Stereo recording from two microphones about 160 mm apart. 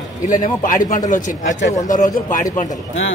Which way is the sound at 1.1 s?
55° left (ahead or behind).